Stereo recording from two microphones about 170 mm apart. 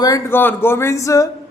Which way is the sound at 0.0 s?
15° left (ahead or behind).